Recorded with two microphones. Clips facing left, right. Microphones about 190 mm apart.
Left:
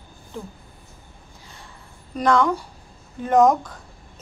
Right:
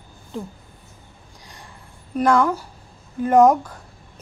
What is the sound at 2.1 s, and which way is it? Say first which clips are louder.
Speech: right 1 dB; 5° right (ahead or behind).